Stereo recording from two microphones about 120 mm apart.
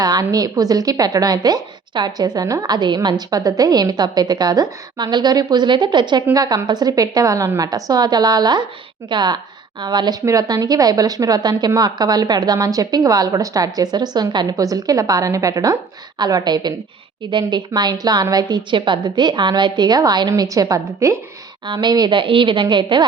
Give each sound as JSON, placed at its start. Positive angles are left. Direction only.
{"t": 0.0, "sound": "speech", "side_deg": -30}
{"t": 21.7, "sound": "speech", "side_deg": -40}